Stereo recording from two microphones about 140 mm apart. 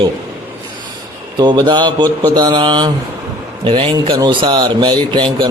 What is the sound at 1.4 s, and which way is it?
A man's voice, 30° right (ahead or behind).